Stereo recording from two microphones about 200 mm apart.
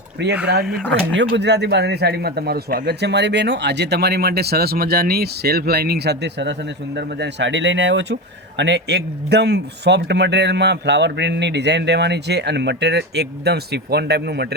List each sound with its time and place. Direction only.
0.4 s a man's voice: 55° right (ahead or behind)